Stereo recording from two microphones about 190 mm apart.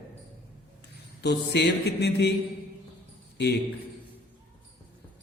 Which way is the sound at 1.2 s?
60° left (ahead or behind).